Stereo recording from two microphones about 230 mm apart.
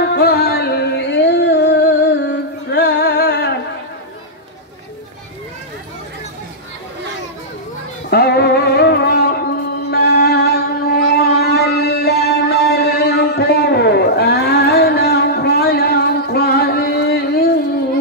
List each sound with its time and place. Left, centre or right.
0.0 s music: left
8.1 s music: left